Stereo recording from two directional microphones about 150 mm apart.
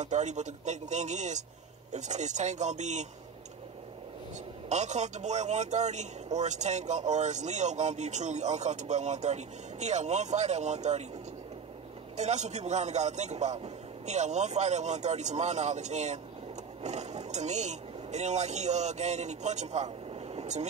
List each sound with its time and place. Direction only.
0.0 s a man's voice: 50° right (ahead or behind)
4.6 s a man's voice: 50° right (ahead or behind)
12.2 s a man's voice: 50° right (ahead or behind)